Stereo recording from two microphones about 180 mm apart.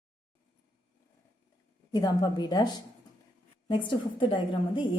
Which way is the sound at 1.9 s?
25° left (ahead or behind).